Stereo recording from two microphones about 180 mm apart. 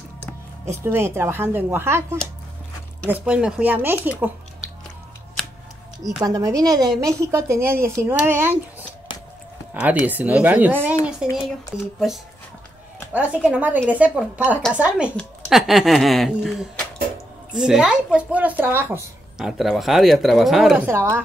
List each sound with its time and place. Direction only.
0.8 s a woman's voice: 15° right (ahead or behind)
6.2 s a woman's voice: 20° right (ahead or behind)
9.8 s a woman's voice: 10° right (ahead or behind)
13.1 s a woman's voice: 5° right (ahead or behind)
19.3 s speech: centre (ahead or behind)
20.8 s a woman's voice: 15° right (ahead or behind)